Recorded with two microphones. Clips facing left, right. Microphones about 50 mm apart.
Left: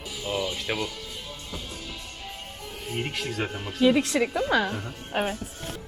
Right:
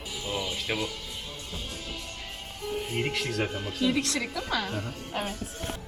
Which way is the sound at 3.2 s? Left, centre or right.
Left.